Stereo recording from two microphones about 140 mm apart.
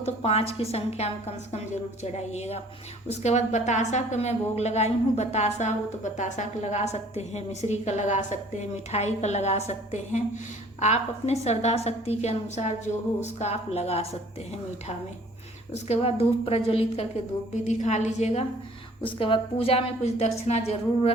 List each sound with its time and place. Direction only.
0.0 s a woman's voice: 50° left (ahead or behind)
15.7 s a woman's voice: 50° left (ahead or behind)
17.5 s a woman's voice: 55° left (ahead or behind)
19.0 s a woman's voice: 40° left (ahead or behind)